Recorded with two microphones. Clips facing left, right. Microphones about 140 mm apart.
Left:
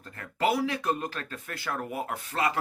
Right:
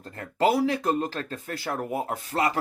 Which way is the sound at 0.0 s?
35° right (ahead or behind).